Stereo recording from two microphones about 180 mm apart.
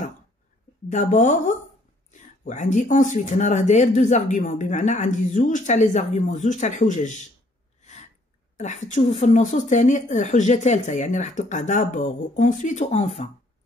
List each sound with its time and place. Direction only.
0.8 s speech: 45° left (ahead or behind)
7.8 s a sound: 40° left (ahead or behind)
8.5 s speech: 40° left (ahead or behind)